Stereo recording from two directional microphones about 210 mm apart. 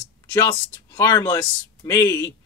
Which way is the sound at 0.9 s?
15° left (ahead or behind).